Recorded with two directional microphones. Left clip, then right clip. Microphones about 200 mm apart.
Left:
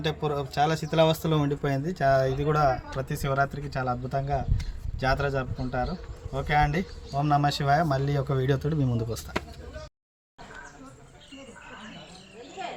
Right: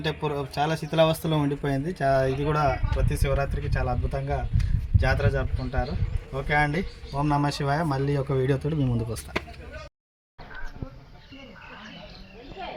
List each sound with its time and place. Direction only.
0.0 s speech: 10° right (ahead or behind)